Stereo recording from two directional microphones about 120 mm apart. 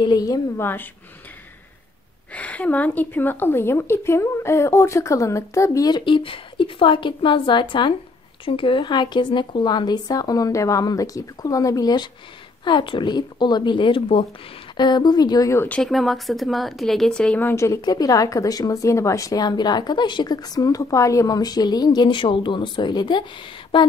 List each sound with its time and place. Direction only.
0.0 s speech: 30° left (ahead or behind)
2.3 s a woman's voice: 10° left (ahead or behind)
5.9 s a woman's voice: 40° left (ahead or behind)
14.8 s speech: 35° left (ahead or behind)
15.7 s speech: 5° left (ahead or behind); by 23.2 s 40° left (ahead or behind)